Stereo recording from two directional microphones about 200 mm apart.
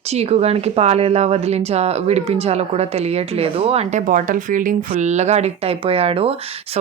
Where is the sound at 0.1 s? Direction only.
30° right (ahead or behind).